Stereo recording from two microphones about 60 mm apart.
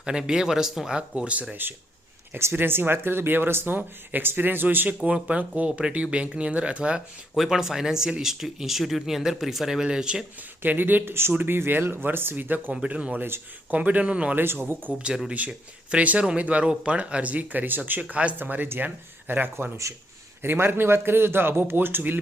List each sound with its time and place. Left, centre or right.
0.0 s speech: centre
1.1 s speech: right
2.3 s speech: right
5.0 s speech: right
7.3 s speech: centre
10.6 s speech: right
12.7 s speech: centre
14.3 s speech: right
14.9 s speech: centre; by 22.2 s right